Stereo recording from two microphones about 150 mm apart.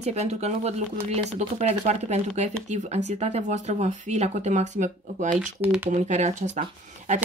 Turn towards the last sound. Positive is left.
turn(degrees=-55)  # may be behind; listen again after turning